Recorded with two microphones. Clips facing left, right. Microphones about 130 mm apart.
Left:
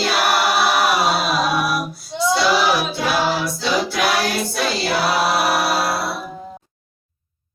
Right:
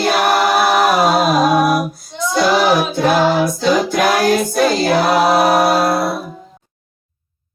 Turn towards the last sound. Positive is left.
turn(degrees=-45)  # may be behind; listen again after turning